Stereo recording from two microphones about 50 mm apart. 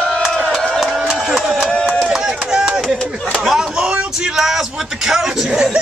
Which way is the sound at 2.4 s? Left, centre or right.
Centre.